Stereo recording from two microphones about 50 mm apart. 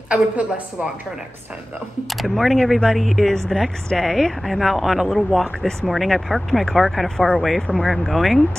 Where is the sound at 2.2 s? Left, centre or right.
Centre.